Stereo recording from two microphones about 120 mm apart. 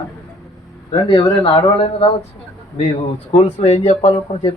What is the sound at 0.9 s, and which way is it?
A man's voice, 50° left (ahead or behind).